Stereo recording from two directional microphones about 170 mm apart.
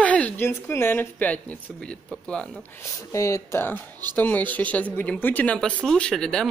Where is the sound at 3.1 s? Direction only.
15° left (ahead or behind).